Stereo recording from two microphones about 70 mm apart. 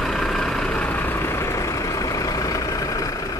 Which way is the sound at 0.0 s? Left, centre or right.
Centre.